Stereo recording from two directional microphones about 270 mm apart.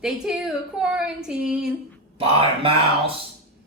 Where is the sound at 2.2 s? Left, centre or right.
Centre.